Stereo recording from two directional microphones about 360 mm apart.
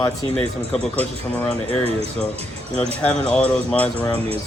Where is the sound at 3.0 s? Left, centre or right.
Centre.